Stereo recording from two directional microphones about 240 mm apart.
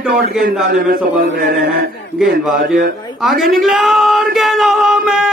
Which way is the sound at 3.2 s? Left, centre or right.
Centre.